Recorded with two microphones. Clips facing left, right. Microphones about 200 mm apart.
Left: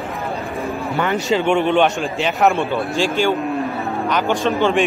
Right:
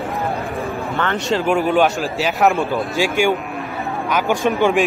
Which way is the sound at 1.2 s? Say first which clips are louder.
Even; centre (ahead or behind).